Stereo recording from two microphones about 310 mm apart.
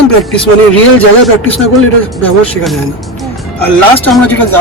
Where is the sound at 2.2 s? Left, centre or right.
Centre.